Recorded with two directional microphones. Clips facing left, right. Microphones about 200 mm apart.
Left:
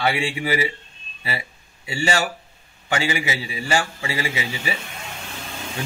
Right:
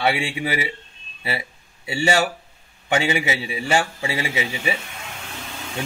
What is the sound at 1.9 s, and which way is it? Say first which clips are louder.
A man's voice: right 3 dB; 20° right (ahead or behind).